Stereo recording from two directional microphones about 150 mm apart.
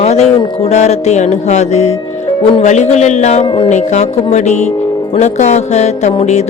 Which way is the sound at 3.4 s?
30° left (ahead or behind).